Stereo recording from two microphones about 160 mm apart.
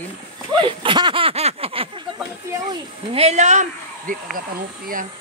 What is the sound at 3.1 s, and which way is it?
Speech, 40° right (ahead or behind).